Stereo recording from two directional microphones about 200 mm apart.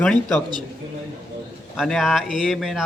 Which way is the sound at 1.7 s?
Centre (ahead or behind).